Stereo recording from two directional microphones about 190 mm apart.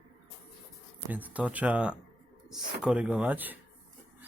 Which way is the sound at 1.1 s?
10° right (ahead or behind).